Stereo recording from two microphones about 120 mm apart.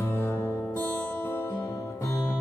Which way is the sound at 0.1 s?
20° left (ahead or behind).